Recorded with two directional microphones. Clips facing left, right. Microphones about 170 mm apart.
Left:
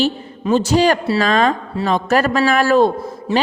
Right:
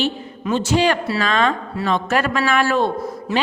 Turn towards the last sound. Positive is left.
turn(degrees=40)  # may be behind; listen again after turning